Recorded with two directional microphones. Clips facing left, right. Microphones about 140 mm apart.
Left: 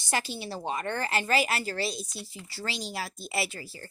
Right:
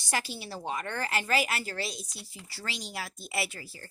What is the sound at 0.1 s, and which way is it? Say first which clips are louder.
A woman's voice: left 2 dB; 25° left (ahead or behind).